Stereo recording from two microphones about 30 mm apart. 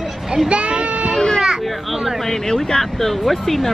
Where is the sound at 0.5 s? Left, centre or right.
Right.